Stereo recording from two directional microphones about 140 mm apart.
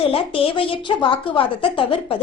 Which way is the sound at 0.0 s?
40° left (ahead or behind).